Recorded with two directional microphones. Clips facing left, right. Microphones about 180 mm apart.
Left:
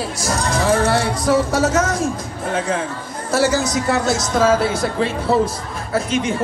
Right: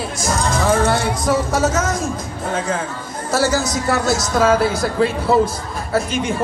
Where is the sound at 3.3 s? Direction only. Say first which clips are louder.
Left 1 dB; 30° left (ahead or behind).